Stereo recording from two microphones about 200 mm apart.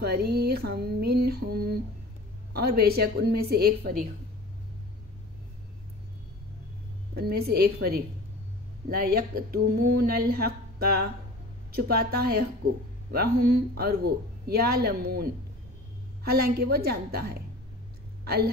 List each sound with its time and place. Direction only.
0.0 s speech: 50° right (ahead or behind)
7.2 s speech: 50° right (ahead or behind)
16.3 s speech: 50° right (ahead or behind)